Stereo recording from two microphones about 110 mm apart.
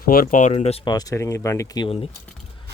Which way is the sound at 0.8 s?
35° left (ahead or behind).